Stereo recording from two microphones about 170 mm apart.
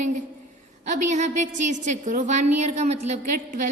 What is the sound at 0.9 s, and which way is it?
A woman's voice, 45° right (ahead or behind).